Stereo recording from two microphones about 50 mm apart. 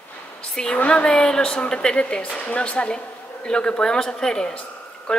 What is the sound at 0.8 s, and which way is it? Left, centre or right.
Speech, left.